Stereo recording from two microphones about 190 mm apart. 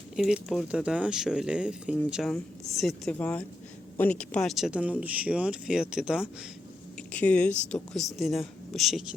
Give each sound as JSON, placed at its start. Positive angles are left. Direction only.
{"t": 0.2, "sound": "speech", "side_deg": 0}
{"t": 7.1, "sound": "speech", "side_deg": 5}